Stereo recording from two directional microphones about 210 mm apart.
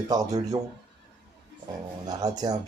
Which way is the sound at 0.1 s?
15° right (ahead or behind).